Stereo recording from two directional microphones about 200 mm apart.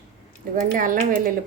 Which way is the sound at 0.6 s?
45° right (ahead or behind).